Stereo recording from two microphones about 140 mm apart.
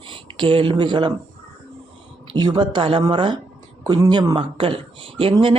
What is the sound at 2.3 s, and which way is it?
Speech, 35° right (ahead or behind).